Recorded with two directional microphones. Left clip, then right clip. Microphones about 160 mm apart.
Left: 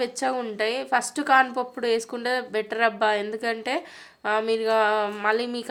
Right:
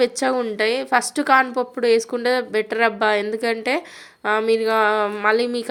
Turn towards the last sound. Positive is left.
turn(degrees=-25)  # may be behind; listen again after turning